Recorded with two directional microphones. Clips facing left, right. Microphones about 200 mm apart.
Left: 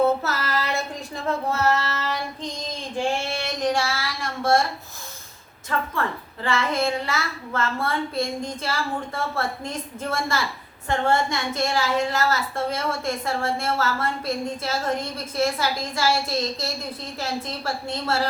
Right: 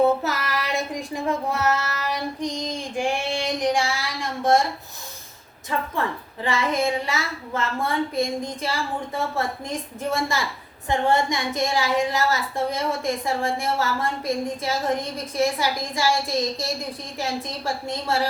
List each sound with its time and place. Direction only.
0.2 s child singing: 15° right (ahead or behind)
5.7 s a woman's voice: 15° right (ahead or behind)